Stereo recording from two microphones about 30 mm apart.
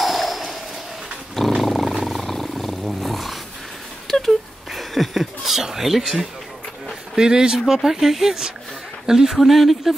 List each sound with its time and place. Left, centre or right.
0.0 s a sound: centre
1.6 s roaring cats: centre
2.0 s wild animals: centre
2.3 s roar: centre
4.1 s a sound: centre
7.2 s speech: right
7.6 s speech: centre
9.4 s speech: centre